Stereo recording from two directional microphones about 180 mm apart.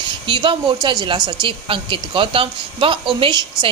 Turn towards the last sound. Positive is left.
turn(degrees=-25)  # may be behind; listen again after turning